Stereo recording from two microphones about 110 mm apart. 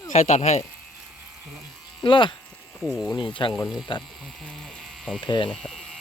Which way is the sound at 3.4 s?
45° left (ahead or behind).